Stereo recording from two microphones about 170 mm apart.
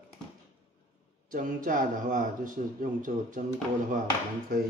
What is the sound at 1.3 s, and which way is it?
Speech, 55° right (ahead or behind).